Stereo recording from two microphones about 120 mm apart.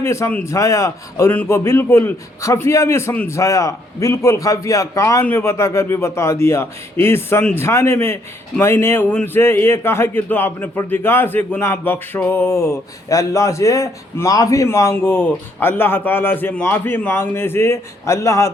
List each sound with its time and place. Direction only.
0.0 s a man's voice: 25° left (ahead or behind)